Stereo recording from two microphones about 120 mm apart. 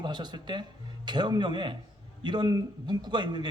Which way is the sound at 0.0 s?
35° right (ahead or behind).